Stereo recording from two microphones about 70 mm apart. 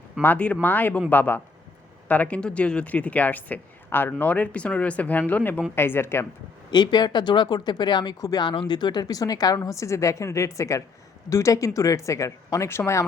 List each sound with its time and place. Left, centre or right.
0.3 s a woman's voice: left
6.7 s speech: left
9.6 s speech: left
12.6 s a woman's voice: left